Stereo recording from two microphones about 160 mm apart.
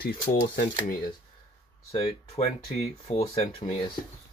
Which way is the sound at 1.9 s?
40° left (ahead or behind).